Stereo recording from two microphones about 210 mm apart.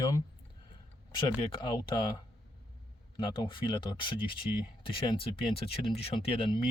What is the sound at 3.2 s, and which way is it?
Speech, 25° left (ahead or behind).